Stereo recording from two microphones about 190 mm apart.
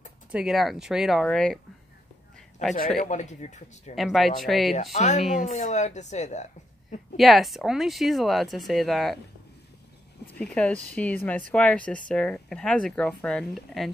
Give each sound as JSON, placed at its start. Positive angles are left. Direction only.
{"t": 0.3, "sound": "speech", "side_deg": -5}
{"t": 3.0, "sound": "a woman's voice", "side_deg": 40}
{"t": 3.9, "sound": "speech", "side_deg": 0}
{"t": 4.9, "sound": "a woman's voice", "side_deg": 40}
{"t": 7.2, "sound": "speech", "side_deg": 0}
{"t": 10.2, "sound": "speech", "side_deg": 5}